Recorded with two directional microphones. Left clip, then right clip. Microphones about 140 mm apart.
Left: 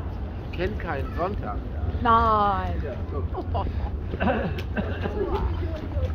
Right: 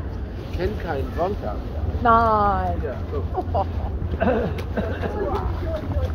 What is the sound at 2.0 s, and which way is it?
Speech, 20° left (ahead or behind).